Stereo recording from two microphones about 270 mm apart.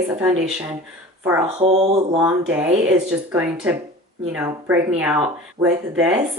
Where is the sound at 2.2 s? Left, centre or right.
Centre.